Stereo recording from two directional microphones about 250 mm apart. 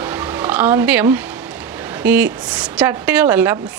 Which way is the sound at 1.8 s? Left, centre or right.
Centre.